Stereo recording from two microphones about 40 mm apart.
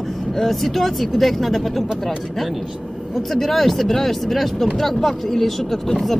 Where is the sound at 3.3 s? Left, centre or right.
Centre.